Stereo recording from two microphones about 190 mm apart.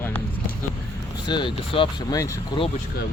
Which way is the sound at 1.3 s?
25° left (ahead or behind).